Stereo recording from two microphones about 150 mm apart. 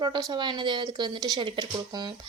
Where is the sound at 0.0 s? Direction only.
30° right (ahead or behind).